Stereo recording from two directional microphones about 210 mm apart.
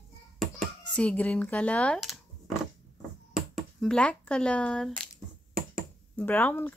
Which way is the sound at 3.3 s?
Centre (ahead or behind).